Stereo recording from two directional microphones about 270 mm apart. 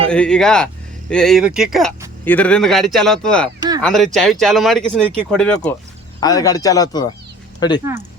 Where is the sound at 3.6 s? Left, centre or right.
Centre.